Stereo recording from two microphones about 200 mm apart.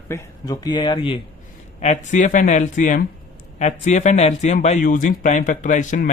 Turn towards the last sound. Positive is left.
turn(degrees=40)  # may be behind; listen again after turning